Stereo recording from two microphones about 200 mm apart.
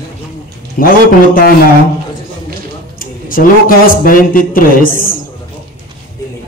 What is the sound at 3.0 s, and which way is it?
Speech, 45° left (ahead or behind).